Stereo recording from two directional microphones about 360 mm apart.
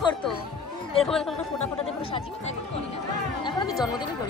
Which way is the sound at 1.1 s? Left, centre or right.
Centre.